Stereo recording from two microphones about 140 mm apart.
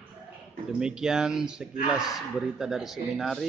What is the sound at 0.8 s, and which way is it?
Speech, 5° right (ahead or behind).